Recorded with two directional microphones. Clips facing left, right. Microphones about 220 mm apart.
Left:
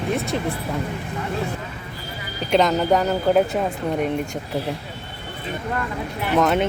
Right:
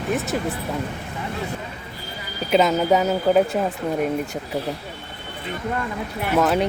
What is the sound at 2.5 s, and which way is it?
Speech, 5° right (ahead or behind).